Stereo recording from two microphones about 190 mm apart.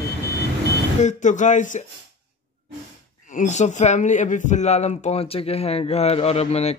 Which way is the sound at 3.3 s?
40° left (ahead or behind).